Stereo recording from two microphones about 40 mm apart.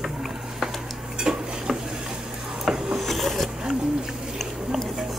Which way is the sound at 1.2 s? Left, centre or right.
Centre.